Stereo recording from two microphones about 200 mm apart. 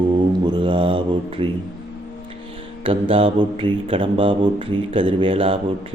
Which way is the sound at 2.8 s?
25° right (ahead or behind).